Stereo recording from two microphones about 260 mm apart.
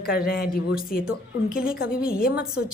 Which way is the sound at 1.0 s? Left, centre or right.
Centre.